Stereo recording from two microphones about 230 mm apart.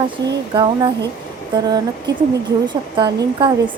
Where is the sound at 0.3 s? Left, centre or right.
Centre.